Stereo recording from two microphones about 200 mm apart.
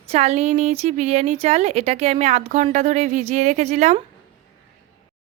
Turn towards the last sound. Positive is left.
turn(degrees=-35)  # may be behind; listen again after turning